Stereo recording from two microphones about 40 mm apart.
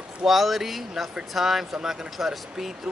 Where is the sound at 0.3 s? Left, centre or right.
Centre.